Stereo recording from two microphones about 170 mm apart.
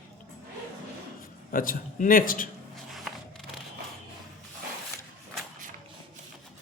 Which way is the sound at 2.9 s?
Centre (ahead or behind).